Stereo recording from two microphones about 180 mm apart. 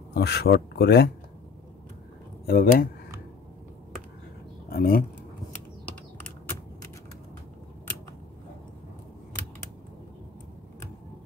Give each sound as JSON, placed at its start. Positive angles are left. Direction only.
{"t": 0.1, "sound": "speech", "side_deg": 65}
{"t": 2.4, "sound": "speech", "side_deg": 60}
{"t": 4.6, "sound": "speech", "side_deg": 55}